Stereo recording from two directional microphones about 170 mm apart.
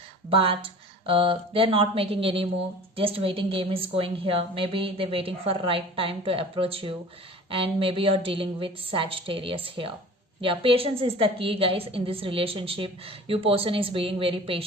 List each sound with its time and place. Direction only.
0.3 s a woman's voice: 35° right (ahead or behind)